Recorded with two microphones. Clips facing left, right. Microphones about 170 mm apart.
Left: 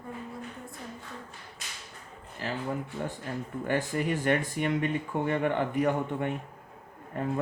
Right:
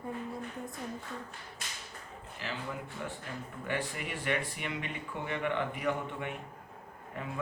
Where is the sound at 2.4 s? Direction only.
40° left (ahead or behind).